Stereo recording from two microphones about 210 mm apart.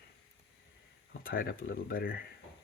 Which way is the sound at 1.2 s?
45° left (ahead or behind).